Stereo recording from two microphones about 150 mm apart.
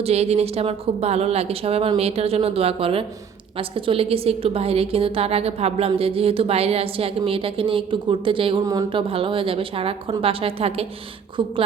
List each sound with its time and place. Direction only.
0.0 s a woman's voice: 45° right (ahead or behind)